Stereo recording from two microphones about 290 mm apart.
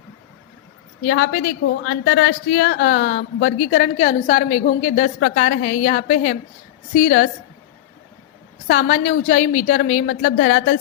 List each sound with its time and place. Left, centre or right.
1.0 s a woman's voice: left
8.6 s a woman's voice: left